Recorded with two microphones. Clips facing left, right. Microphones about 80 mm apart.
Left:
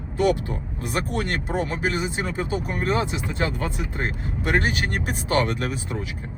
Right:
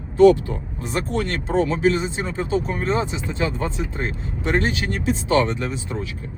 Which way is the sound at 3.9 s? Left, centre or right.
Left.